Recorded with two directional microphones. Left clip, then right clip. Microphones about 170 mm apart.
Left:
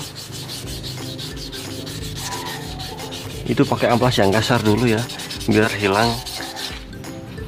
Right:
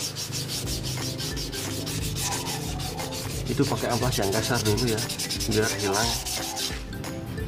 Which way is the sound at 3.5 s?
55° left (ahead or behind).